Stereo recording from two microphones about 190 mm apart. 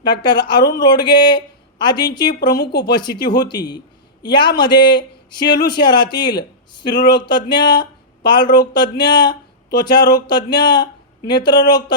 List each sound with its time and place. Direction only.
0.0 s speech: 20° left (ahead or behind)
2.6 s speech: 60° left (ahead or behind)
2.9 s speech: 25° left (ahead or behind)